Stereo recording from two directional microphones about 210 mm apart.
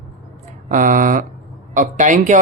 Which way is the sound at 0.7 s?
40° right (ahead or behind).